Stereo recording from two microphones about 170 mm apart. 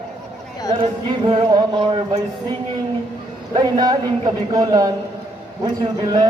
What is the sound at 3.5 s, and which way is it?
A man's voice, 25° right (ahead or behind).